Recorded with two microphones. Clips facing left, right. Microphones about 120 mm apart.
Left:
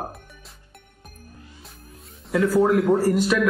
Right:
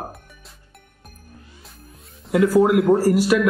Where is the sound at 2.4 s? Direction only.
15° right (ahead or behind).